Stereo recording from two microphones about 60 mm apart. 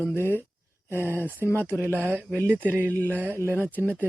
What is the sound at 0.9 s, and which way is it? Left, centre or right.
Speech, right.